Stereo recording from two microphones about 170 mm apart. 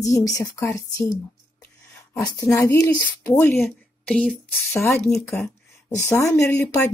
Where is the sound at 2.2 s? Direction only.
20° left (ahead or behind); by 5.3 s centre (ahead or behind).